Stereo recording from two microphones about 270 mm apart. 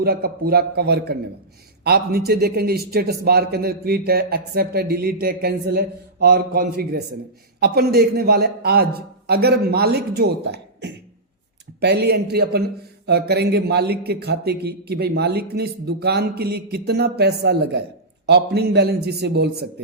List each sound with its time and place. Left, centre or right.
0.0 s a man's voice: right